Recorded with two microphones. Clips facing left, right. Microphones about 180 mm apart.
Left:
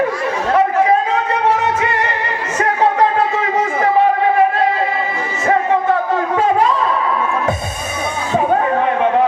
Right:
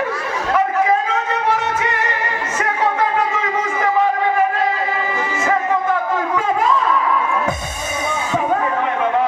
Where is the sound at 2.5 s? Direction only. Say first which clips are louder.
Left 5 dB; 35° left (ahead or behind).